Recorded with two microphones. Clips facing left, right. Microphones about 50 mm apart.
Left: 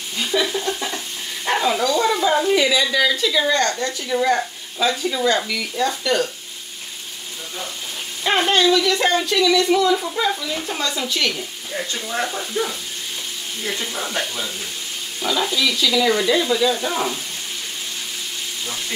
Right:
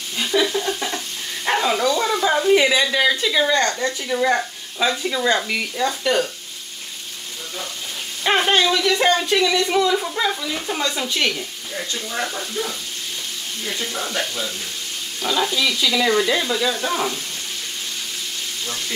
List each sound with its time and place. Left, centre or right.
0.2 s frying: centre
2.5 s a woman's voice: right
4.2 s speech: centre
8.2 s speech: centre
9.3 s a woman's voice: right
10.1 s frying: centre
11.0 s a woman's voice: right
12.1 s speech: centre
15.2 s frying: centre
16.1 s speech: centre
16.4 s frying: centre